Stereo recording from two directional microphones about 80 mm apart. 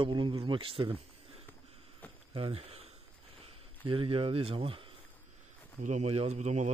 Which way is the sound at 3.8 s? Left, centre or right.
Right.